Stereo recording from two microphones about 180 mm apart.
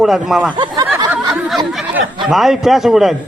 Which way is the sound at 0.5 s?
25° right (ahead or behind).